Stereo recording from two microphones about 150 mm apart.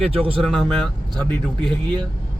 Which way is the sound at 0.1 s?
35° right (ahead or behind).